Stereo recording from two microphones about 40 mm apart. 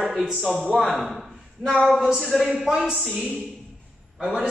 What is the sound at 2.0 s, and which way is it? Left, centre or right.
Speech, centre.